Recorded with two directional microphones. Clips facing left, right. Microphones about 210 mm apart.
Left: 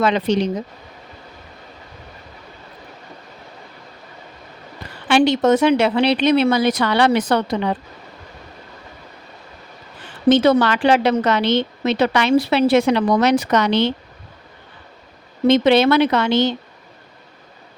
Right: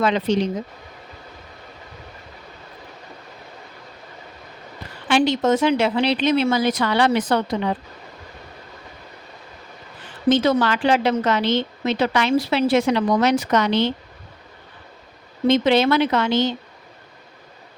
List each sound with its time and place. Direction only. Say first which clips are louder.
0.0 s a woman's voice: left 2 dB; 70° left (ahead or behind)
5.0 s a woman's voice: left 3 dB; 70° left (ahead or behind)
10.2 s a woman's voice: left 4 dB; 65° left (ahead or behind)
15.4 s a woman's voice: left 3 dB; 70° left (ahead or behind)